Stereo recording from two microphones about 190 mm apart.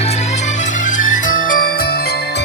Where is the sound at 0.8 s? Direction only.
40° left (ahead or behind).